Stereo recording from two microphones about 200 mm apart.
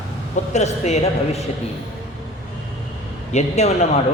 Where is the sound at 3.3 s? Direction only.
35° left (ahead or behind).